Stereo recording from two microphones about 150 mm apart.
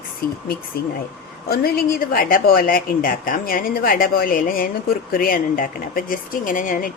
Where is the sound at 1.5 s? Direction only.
85° left.